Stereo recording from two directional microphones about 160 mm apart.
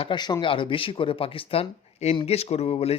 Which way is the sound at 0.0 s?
30° left (ahead or behind).